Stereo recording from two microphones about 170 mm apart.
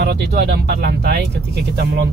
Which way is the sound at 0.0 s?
80° right.